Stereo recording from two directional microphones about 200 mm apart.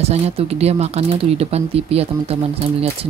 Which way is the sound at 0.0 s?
30° right (ahead or behind).